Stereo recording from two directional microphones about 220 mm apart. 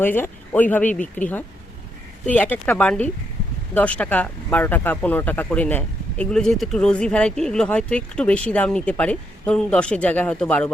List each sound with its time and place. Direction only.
0.0 s speech: 10° left (ahead or behind)